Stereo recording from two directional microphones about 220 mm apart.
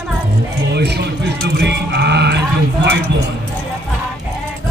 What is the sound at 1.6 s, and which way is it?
Mantra, 50° right (ahead or behind).